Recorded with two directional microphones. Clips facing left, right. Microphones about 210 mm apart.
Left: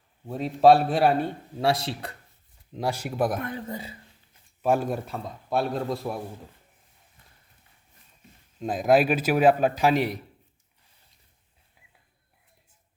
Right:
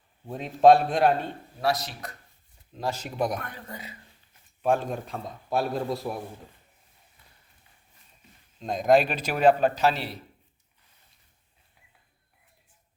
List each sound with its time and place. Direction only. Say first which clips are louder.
0.3 s a man's voice: even; 5° left (ahead or behind)
1.6 s a man's voice: left 2 dB; 30° left (ahead or behind)
2.7 s a man's voice: left 2 dB; 10° left (ahead or behind)
3.3 s a man's voice: left 5 dB; 25° left (ahead or behind)
4.6 s a man's voice: left 1 dB; 5° left (ahead or behind)
8.5 s a man's voice: even; 5° left (ahead or behind)